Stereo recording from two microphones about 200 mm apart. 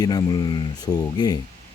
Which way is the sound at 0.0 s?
20° left (ahead or behind).